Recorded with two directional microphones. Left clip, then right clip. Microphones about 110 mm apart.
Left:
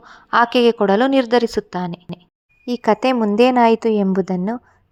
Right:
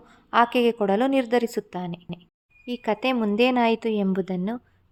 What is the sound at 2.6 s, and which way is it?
A woman's voice, 50° left (ahead or behind).